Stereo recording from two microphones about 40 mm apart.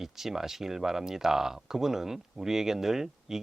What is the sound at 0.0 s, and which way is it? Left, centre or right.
Speech, centre.